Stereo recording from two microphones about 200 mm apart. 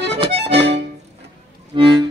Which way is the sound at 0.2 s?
30° right (ahead or behind).